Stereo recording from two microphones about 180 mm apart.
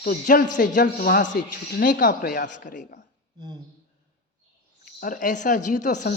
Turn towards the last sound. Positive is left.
turn(degrees=45)  # may be behind; listen again after turning